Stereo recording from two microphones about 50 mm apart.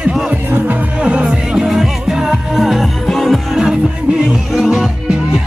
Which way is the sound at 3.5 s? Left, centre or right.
Centre.